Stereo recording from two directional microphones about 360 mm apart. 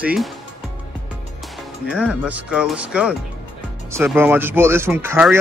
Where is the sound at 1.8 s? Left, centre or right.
Centre.